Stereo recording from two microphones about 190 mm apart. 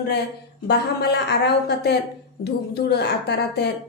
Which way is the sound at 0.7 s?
60° left (ahead or behind).